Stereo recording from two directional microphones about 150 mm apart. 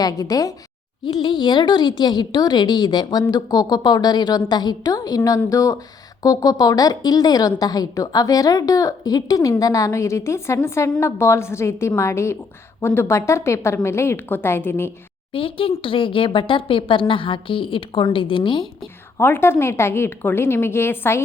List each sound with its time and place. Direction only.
0.0 s a woman's voice: 25° left (ahead or behind)
15.3 s a woman's voice: 35° left (ahead or behind)
19.1 s a woman's voice: 15° left (ahead or behind)